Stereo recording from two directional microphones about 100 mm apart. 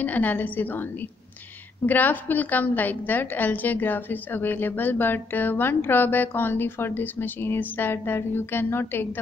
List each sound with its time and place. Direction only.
0.0 s a woman's voice: 15° left (ahead or behind)
1.9 s a woman's voice: 20° left (ahead or behind)